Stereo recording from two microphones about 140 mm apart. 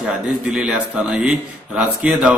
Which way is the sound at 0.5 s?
5° right (ahead or behind).